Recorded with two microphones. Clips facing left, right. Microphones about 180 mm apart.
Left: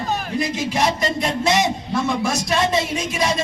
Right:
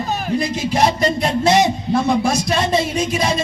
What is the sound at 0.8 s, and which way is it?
Speech, 35° right (ahead or behind).